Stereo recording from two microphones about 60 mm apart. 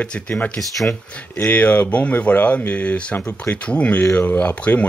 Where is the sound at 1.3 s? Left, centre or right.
Left.